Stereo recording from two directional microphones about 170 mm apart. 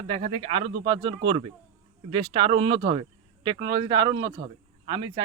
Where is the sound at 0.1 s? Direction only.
35° right (ahead or behind).